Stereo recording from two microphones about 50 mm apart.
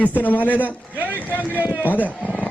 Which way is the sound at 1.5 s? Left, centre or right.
Right.